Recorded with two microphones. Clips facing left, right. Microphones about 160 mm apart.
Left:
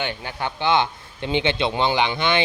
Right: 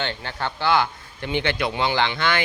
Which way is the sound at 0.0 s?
15° left (ahead or behind).